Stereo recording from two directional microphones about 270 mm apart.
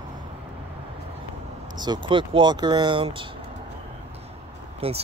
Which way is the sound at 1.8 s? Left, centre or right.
Centre.